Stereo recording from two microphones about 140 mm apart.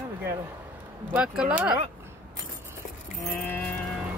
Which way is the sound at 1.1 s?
5° right (ahead or behind).